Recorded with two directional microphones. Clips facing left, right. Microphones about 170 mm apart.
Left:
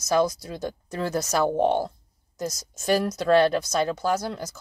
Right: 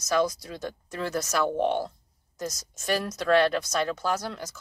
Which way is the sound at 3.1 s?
40° left (ahead or behind).